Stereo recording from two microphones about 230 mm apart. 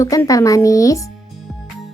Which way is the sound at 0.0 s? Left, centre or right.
Centre.